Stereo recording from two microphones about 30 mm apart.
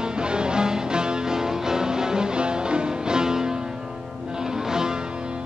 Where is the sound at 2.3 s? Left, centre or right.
Right.